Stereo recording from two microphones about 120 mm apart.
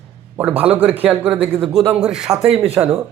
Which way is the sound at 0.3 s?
10° right (ahead or behind).